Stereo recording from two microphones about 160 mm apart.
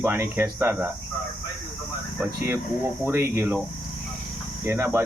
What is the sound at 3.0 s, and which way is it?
Speech, 15° right (ahead or behind).